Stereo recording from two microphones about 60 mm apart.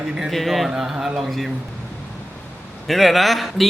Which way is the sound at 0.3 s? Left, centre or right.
Centre.